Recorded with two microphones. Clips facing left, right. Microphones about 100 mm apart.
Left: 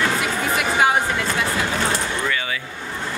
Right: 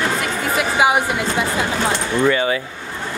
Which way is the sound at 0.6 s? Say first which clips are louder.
Right 3 dB; 10° right (ahead or behind).